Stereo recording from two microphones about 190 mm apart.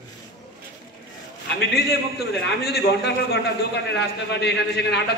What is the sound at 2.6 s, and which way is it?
A man's voice, 60° left (ahead or behind).